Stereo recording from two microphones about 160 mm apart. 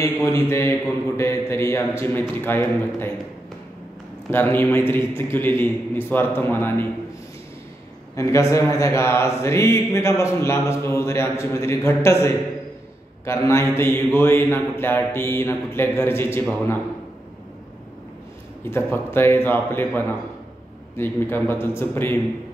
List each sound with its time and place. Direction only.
0.0 s speech: 20° left (ahead or behind)
4.3 s speech: 15° left (ahead or behind)
8.2 s speech: 20° left (ahead or behind)
18.7 s speech: 15° left (ahead or behind)